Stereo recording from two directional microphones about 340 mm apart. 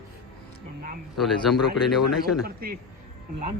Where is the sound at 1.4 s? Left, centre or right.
Centre.